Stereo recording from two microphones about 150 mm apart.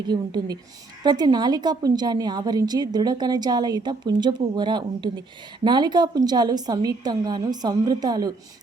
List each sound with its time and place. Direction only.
0.1 s a woman's voice: 25° right (ahead or behind)